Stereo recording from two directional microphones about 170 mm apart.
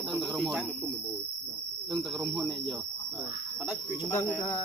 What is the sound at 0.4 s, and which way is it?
Speech, centre (ahead or behind).